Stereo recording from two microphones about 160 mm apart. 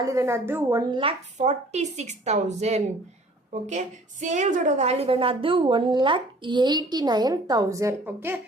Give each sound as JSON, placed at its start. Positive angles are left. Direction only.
{"t": 0.0, "sound": "a woman's voice", "side_deg": -20}
{"t": 1.4, "sound": "a woman's voice", "side_deg": -45}